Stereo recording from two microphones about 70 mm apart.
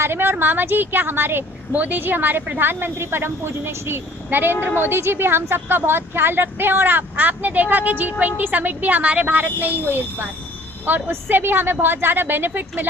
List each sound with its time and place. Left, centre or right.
0.0 s a woman's voice: right